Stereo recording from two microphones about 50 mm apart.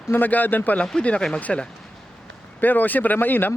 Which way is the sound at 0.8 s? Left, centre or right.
Left.